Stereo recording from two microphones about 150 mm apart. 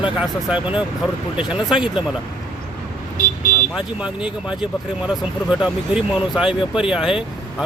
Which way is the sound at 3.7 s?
5° right (ahead or behind).